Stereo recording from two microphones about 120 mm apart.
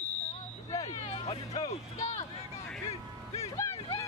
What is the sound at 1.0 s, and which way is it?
Speech, 55° left (ahead or behind).